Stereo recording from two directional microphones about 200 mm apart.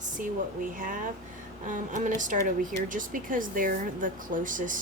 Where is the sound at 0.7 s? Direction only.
45° right (ahead or behind).